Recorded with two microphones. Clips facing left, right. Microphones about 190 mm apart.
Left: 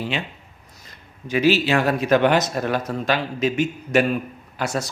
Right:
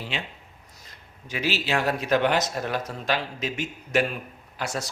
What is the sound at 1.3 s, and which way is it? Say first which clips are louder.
Speech: left 9 dB; 55° left (ahead or behind).